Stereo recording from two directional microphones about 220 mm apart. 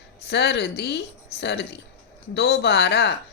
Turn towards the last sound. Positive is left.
turn(degrees=50)  # may be behind; listen again after turning